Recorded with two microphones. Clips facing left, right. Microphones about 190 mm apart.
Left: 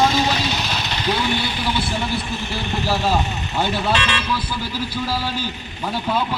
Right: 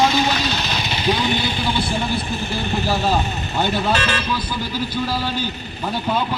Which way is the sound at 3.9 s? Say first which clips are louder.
Right 1 dB; 40° right (ahead or behind).